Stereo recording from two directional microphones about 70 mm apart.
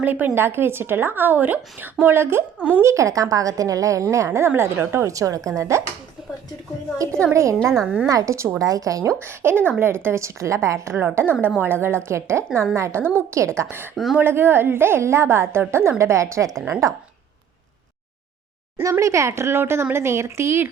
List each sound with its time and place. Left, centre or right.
0.0 s a woman's voice: right
2.6 s a woman's voice: right
2.8 s a woman's voice: right
4.4 s a woman's voice: right
5.1 s a woman's voice: right
7.3 s a woman's voice: right
9.2 s a woman's voice: right
11.1 s a woman's voice: right
13.9 s speech: centre
14.2 s a woman's voice: right
18.8 s a woman's voice: right